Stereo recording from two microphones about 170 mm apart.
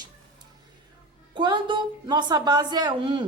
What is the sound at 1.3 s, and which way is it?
A woman's voice, 25° right (ahead or behind).